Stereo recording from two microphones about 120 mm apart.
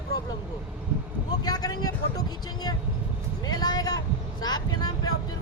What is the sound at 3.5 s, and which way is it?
Speech, 35° left (ahead or behind).